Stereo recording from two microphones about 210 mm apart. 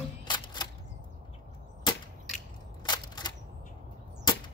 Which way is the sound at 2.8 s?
20° left (ahead or behind).